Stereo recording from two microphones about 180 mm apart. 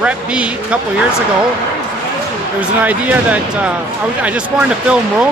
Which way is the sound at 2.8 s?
10° right (ahead or behind).